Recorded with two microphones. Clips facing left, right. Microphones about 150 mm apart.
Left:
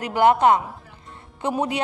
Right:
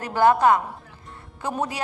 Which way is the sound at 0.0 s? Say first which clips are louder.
Left 1 dB; 20° left (ahead or behind).